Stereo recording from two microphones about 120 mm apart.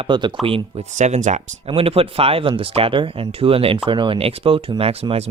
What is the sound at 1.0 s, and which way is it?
Speech, 90° right.